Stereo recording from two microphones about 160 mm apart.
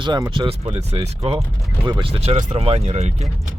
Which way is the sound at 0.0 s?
30° right (ahead or behind).